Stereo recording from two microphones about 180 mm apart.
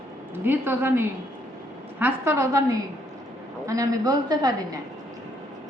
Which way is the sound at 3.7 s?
20° right (ahead or behind).